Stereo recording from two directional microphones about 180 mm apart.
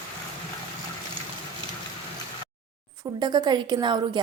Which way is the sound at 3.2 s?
25° right (ahead or behind).